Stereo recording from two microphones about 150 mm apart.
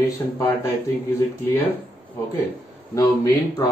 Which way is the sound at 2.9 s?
25° left (ahead or behind).